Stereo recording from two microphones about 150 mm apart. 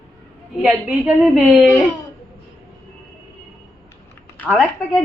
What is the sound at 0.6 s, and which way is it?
A woman's voice, 10° right (ahead or behind).